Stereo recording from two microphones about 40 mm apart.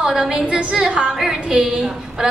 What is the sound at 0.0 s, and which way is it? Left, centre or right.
A woman's voice, right.